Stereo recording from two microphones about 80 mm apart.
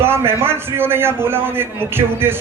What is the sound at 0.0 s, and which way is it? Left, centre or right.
A man's voice, right.